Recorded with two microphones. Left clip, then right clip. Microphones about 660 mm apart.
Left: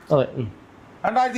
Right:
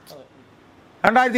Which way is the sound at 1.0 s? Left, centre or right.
Right.